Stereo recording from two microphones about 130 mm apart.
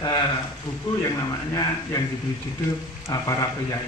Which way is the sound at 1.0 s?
25° left (ahead or behind).